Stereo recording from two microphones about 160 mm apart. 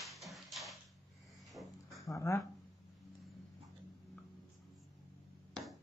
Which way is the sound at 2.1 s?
20° left (ahead or behind).